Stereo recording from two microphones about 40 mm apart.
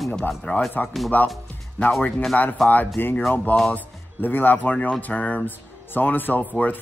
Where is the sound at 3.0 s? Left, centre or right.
Left.